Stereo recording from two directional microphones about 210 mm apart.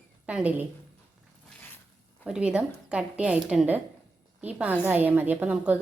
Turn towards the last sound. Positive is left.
turn(degrees=-5)  # may be behind; listen again after turning